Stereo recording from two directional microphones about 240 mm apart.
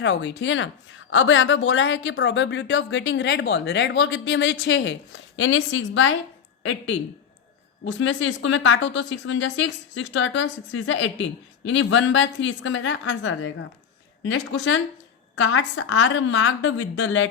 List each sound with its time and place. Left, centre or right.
0.0 s a woman's voice: left